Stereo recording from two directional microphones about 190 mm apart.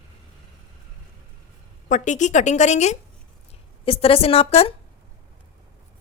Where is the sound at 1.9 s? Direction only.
40° left (ahead or behind).